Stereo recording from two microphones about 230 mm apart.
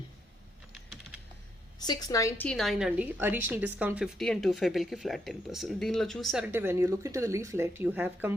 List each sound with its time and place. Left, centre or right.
1.8 s a woman's voice: centre
6.5 s speech: centre